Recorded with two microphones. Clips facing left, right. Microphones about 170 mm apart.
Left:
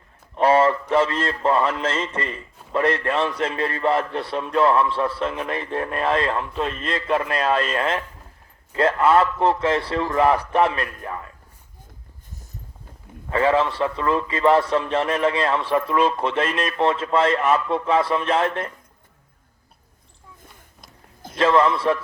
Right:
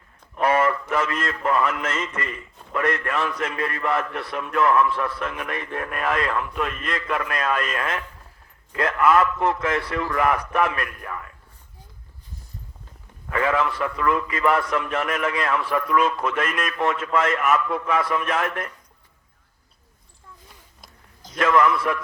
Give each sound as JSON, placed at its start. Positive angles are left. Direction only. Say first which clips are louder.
{"t": 0.3, "sound": "a man's voice", "louder": "left 4 dB", "side_deg": 30}
{"t": 13.3, "sound": "a man's voice", "louder": "left 3 dB", "side_deg": 30}
{"t": 21.3, "sound": "a man's voice", "louder": "left 1 dB", "side_deg": 30}